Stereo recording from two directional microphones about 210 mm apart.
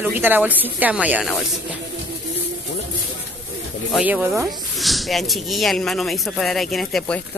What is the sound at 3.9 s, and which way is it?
Speech, 5° right (ahead or behind).